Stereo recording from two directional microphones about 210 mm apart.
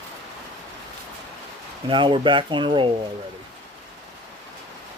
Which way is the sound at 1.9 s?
25° right (ahead or behind).